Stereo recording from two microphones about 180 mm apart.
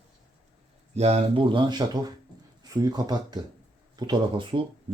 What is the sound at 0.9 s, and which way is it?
Speech, 35° right (ahead or behind).